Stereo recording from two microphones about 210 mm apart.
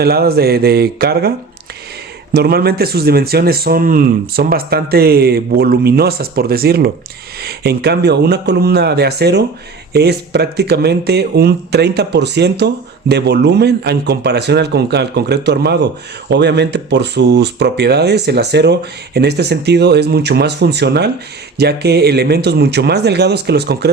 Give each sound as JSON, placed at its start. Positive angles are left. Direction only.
{"t": 0.0, "sound": "speech", "side_deg": -45}
{"t": 2.3, "sound": "speech", "side_deg": -50}